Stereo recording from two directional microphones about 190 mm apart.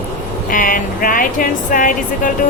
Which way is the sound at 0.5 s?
45° left (ahead or behind).